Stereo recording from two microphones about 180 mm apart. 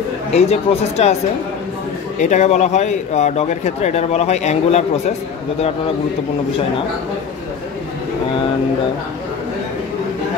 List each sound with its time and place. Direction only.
0.3 s speech: 35° left (ahead or behind)
2.1 s speech: 40° left (ahead or behind)